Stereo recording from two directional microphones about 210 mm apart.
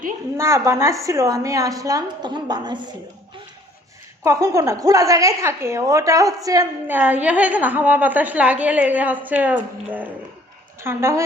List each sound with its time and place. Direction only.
0.3 s a woman's voice: 15° right (ahead or behind)
4.2 s a woman's voice: 15° right (ahead or behind)